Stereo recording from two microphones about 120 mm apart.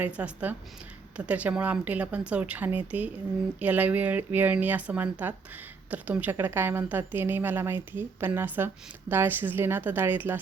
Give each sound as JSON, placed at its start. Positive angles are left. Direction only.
{"t": 0.0, "sound": "a woman's voice", "side_deg": -10}